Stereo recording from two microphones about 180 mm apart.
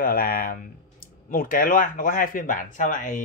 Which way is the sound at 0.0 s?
55° left (ahead or behind).